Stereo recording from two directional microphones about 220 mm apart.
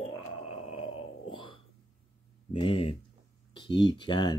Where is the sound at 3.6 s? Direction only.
20° left (ahead or behind).